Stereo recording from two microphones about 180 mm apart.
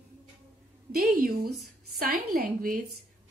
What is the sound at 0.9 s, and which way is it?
Speech, 55° right (ahead or behind).